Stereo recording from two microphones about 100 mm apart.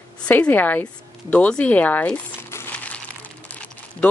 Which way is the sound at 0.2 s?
15° left (ahead or behind).